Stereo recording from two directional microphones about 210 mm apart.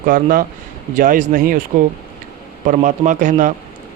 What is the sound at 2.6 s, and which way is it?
Speech, 35° right (ahead or behind).